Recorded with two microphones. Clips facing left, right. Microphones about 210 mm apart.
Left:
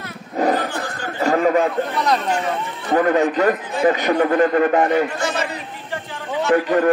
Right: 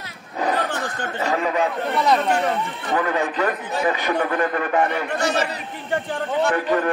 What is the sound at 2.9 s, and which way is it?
A man's voice, 40° left (ahead or behind).